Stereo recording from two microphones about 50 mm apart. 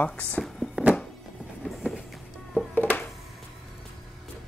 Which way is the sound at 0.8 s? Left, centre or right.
Right.